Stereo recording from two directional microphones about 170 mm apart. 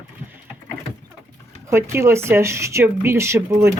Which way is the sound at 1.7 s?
15° right (ahead or behind).